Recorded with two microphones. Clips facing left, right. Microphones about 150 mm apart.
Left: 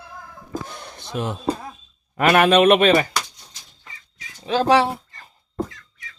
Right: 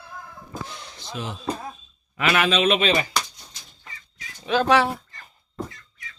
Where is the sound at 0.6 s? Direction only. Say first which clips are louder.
Left 2 dB; 50° left (ahead or behind).